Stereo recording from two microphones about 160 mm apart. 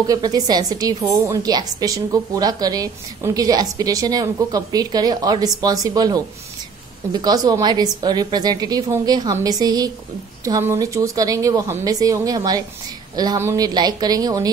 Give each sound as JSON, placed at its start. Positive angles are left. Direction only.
{"t": 0.0, "sound": "a woman's voice", "side_deg": -25}